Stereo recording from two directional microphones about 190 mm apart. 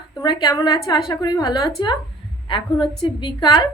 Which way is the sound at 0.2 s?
20° left (ahead or behind).